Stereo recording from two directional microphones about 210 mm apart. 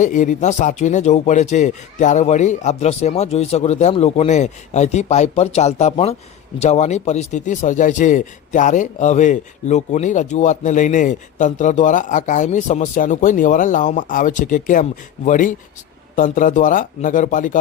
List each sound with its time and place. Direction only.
0.0 s a man's voice: 35° left (ahead or behind)